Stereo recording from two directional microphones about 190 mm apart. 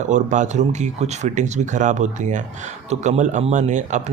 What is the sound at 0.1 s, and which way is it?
Speech, 40° right (ahead or behind).